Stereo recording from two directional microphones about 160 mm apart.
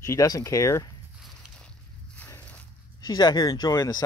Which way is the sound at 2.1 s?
10° left (ahead or behind).